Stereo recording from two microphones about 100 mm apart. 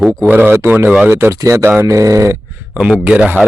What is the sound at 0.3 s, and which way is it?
Speech, 20° right (ahead or behind).